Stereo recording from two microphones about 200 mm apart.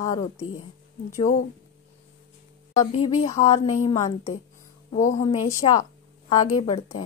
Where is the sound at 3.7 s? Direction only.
35° left (ahead or behind).